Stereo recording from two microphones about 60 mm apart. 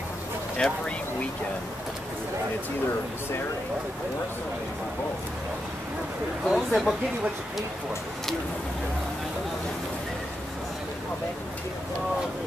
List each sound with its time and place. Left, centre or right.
0.6 s speech: centre
6.4 s speech: centre